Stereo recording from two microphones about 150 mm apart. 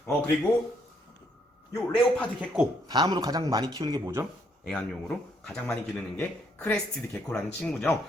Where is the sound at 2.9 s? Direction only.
30° right (ahead or behind).